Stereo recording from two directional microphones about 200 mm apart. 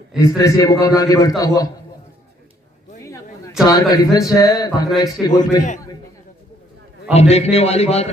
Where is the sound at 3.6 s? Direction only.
15° left (ahead or behind).